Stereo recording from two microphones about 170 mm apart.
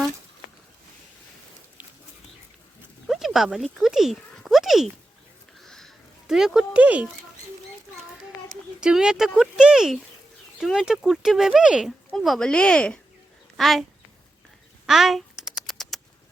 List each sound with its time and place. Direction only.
1.8 s dog: 5° right (ahead or behind)
3.1 s speech: centre (ahead or behind)
5.5 s a sound: centre (ahead or behind)
8.8 s speech: 5° right (ahead or behind)
14.8 s typing: centre (ahead or behind)